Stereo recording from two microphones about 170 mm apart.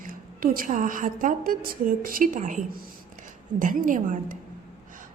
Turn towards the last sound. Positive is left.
turn(degrees=-50)  # may be behind; listen again after turning